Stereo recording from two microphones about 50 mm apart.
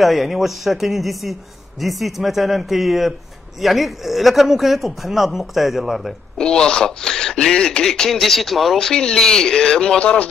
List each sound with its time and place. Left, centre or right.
0.0 s speech: centre
6.3 s speech: centre
8.7 s speech: centre
9.9 s speech: left